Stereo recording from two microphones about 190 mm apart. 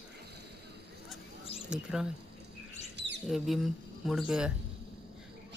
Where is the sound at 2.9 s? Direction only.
65° right (ahead or behind).